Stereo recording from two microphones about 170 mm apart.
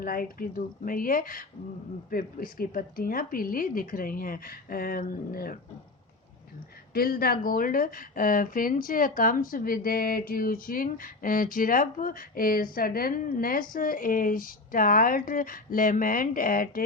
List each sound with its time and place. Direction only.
0.0 s speech: 55° left (ahead or behind)
6.9 s speech: 65° left (ahead or behind)